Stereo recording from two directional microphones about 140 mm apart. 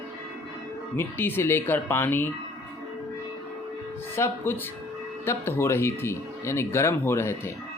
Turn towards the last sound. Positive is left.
turn(degrees=20)  # may be behind; listen again after turning